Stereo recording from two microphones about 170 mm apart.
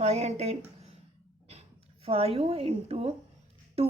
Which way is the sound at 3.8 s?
35° right (ahead or behind).